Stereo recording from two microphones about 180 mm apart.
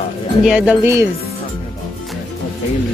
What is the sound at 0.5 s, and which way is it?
Speech, 5° right (ahead or behind).